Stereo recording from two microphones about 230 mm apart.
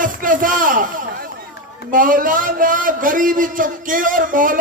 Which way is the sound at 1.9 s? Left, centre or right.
Right.